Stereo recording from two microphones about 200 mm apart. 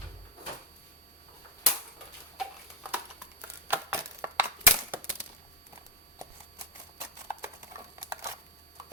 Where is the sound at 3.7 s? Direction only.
10° right (ahead or behind).